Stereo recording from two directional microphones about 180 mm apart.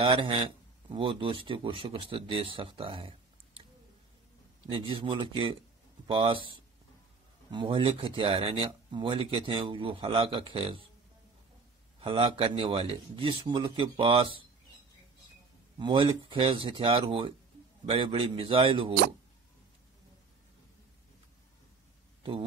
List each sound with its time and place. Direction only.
0.0 s speech: 30° right (ahead or behind)
4.6 s speech: 30° right (ahead or behind)
12.0 s speech: 30° right (ahead or behind)
15.8 s speech: 30° right (ahead or behind)